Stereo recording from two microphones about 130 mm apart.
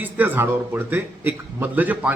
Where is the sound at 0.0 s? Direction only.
15° right (ahead or behind).